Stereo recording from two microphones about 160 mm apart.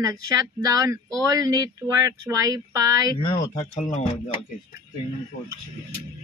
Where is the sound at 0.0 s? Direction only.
20° right (ahead or behind).